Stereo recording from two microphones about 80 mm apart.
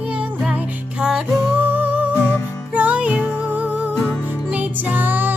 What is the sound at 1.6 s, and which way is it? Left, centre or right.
Music, right.